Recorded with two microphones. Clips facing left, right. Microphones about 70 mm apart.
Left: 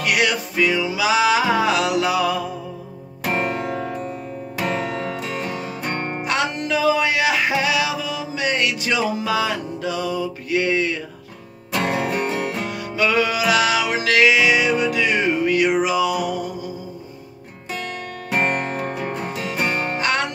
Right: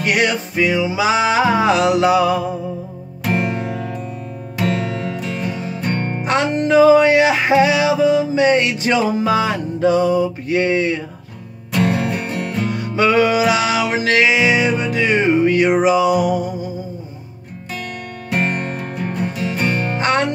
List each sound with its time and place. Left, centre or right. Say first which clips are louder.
0.0 s music: right 3 dB; right
3.7 s music: even; centre
4.6 s music: right 3 dB; left
6.2 s music: right 6 dB; right
12.1 s music: even; centre
12.7 s music: right 5 dB; right
18.8 s music: right 2 dB; centre
20.0 s music: right 6 dB; right